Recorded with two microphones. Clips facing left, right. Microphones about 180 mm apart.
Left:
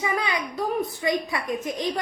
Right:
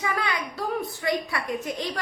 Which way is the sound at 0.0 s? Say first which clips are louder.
Left 2 dB; 20° left (ahead or behind).